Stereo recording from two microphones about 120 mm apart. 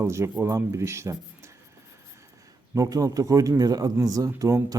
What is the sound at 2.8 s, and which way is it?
Speech, 30° right (ahead or behind).